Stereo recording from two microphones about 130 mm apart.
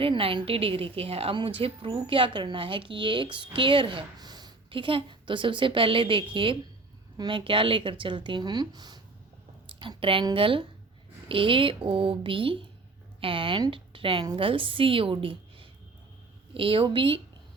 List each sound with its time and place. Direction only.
0.0 s a woman's voice: 45° right (ahead or behind)